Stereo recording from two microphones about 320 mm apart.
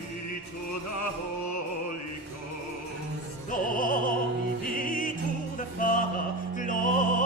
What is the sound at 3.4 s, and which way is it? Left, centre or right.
Music, left.